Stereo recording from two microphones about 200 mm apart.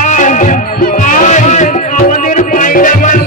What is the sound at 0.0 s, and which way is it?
Music, 40° left (ahead or behind).